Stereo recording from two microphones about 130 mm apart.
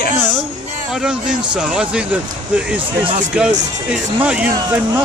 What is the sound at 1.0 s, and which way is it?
Speech, 5° right (ahead or behind).